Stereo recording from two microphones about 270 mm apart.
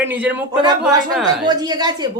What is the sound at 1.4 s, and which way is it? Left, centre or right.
Speech, centre.